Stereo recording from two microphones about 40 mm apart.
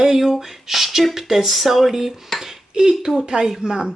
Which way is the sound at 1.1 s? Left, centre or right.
Centre.